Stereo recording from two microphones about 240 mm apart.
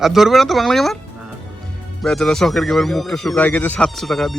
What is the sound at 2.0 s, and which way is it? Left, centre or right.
Speech, centre.